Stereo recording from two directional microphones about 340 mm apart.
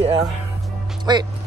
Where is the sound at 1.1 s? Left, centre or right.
Centre.